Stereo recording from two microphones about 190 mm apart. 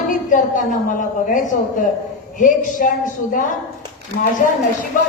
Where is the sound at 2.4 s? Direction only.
45° left (ahead or behind).